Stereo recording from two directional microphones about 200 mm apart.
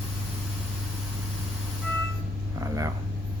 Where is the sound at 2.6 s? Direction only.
15° right (ahead or behind).